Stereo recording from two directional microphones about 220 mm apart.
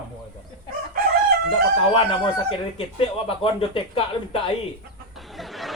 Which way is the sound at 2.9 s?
25° left (ahead or behind).